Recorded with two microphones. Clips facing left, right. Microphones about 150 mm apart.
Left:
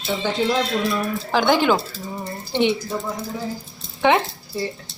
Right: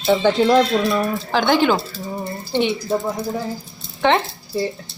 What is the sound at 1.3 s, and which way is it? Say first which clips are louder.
Speech: right 1 dB; 5° left (ahead or behind).